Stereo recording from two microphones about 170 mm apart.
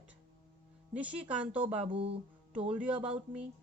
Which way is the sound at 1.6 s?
30° right (ahead or behind).